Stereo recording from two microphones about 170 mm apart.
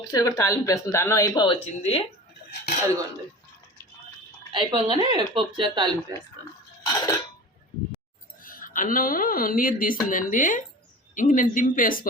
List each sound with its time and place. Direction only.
0.1 s speech: 20° left (ahead or behind)
1.5 s speech: 35° left (ahead or behind)
4.5 s speech: 30° right (ahead or behind)
6.8 s speech: 25° left (ahead or behind)
8.4 s speech: 55° left (ahead or behind)